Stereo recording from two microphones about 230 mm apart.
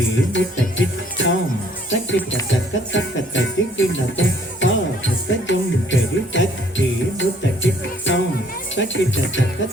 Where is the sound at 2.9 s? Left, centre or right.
Left.